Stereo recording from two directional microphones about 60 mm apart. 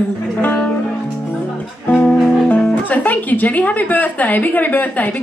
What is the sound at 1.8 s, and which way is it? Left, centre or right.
Music, left.